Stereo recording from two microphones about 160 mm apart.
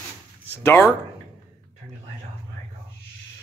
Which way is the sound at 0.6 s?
15° left (ahead or behind).